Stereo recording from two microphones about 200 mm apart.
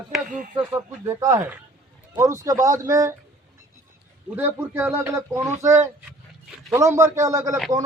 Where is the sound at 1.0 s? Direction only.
15° right (ahead or behind).